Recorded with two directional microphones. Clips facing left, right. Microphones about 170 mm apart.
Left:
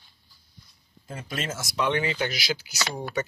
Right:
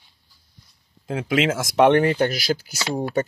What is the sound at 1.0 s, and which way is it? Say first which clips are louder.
Speech: right 12 dB; 90° right.